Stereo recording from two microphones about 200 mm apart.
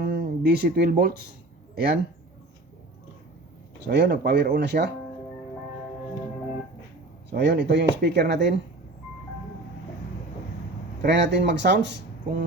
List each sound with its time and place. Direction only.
0.0 s speech: 50° right (ahead or behind)
3.8 s speech: 60° right (ahead or behind)
7.3 s speech: 60° right (ahead or behind)
11.0 s speech: 60° right (ahead or behind)